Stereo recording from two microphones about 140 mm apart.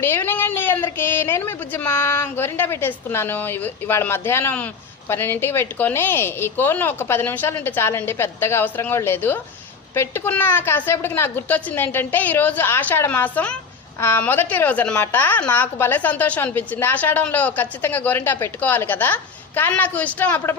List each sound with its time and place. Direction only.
0.0 s a woman's voice: 15° left (ahead or behind)